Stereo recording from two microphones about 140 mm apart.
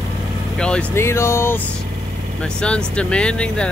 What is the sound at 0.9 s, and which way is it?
Speech, 20° left (ahead or behind).